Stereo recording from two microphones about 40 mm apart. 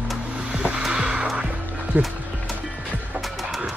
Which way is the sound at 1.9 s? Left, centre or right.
Right.